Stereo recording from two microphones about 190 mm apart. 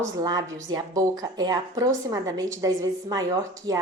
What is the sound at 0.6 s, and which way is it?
A woman's voice, 20° right (ahead or behind).